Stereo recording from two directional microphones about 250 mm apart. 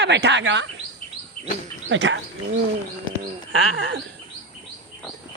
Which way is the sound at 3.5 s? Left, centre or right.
Right.